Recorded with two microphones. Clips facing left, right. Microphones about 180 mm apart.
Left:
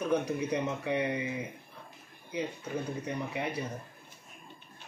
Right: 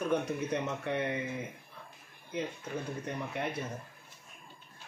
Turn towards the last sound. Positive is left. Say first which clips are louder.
# left 1 dB
turn(degrees=0)  # may be behind; listen again after turning